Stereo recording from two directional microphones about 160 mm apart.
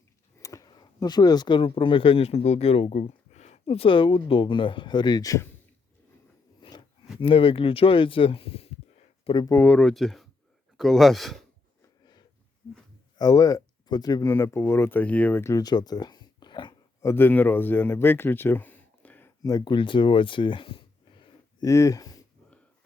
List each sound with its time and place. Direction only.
0.3 s speech: 20° left (ahead or behind)
6.6 s a sound: 30° left (ahead or behind)
7.2 s speech: 35° left (ahead or behind)
9.5 s speech: 10° left (ahead or behind)
13.1 s speech: 25° left (ahead or behind)
17.1 s speech: 10° left (ahead or behind)
19.4 s speech: 25° left (ahead or behind)